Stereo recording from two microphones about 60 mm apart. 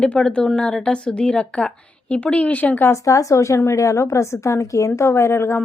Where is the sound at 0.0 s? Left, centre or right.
Centre.